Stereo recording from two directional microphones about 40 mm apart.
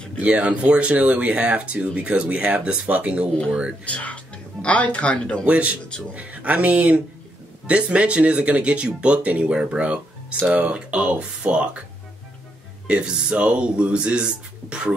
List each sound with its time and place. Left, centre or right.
0.2 s speech: right
3.8 s speech: left
5.4 s speech: right
9.5 s speech: right
12.8 s speech: right